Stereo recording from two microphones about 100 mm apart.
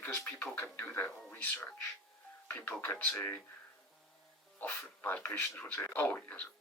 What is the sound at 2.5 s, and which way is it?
Speech, 20° left (ahead or behind).